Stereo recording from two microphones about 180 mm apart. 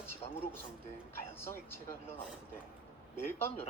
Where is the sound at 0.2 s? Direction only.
35° left (ahead or behind).